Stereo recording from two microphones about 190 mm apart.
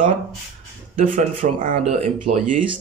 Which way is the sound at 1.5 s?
45° right (ahead or behind).